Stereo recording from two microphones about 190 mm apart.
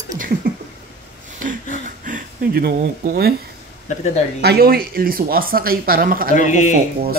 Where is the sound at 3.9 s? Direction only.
35° left (ahead or behind).